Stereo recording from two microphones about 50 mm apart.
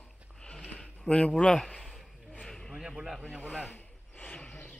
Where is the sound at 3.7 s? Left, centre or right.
Left.